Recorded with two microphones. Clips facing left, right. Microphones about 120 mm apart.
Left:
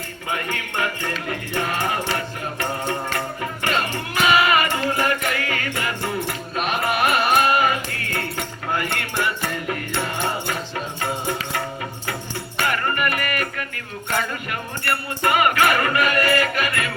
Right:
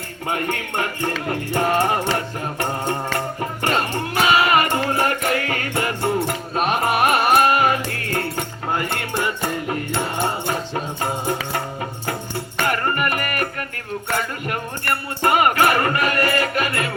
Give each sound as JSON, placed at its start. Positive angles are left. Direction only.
{"t": 0.3, "sound": "music", "side_deg": -45}
{"t": 8.7, "sound": "music", "side_deg": -25}
{"t": 10.5, "sound": "music", "side_deg": -35}
{"t": 12.6, "sound": "music", "side_deg": -40}
{"t": 15.2, "sound": "music", "side_deg": -40}